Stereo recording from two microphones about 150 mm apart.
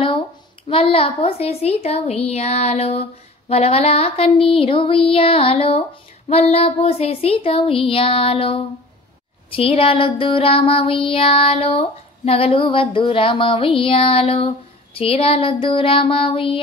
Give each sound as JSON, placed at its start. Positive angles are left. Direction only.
{"t": 0.7, "sound": "speech", "side_deg": 40}